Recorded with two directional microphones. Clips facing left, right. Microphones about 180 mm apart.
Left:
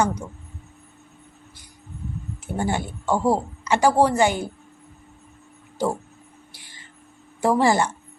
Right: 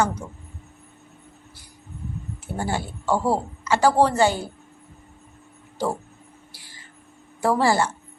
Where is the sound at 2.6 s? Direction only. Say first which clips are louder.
Left 2 dB; 20° left (ahead or behind).